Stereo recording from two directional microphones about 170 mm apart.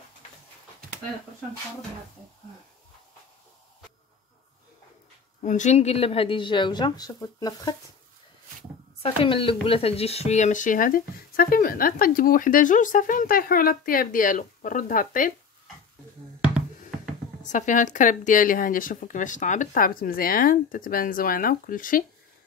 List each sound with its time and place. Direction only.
5.4 s a woman's voice: 45° left (ahead or behind); by 7.7 s 20° left (ahead or behind)
9.0 s speech: 30° left (ahead or behind); by 15.3 s 50° left (ahead or behind)
16.3 s a sound: 5° right (ahead or behind)
17.4 s speech: 45° left (ahead or behind)